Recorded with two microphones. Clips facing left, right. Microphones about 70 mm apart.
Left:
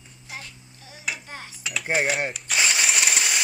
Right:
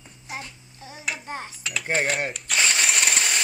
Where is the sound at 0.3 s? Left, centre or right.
Right.